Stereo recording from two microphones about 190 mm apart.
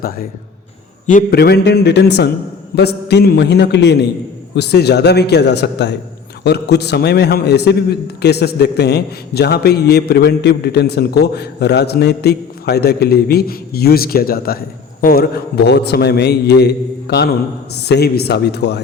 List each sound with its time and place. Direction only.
1.0 s a man's voice: 50° left (ahead or behind)